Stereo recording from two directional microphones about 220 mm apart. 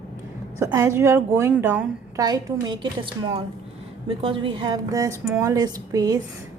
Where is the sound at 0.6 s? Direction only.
15° right (ahead or behind).